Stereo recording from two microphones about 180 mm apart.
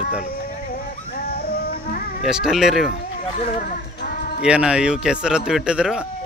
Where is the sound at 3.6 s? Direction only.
50° left (ahead or behind).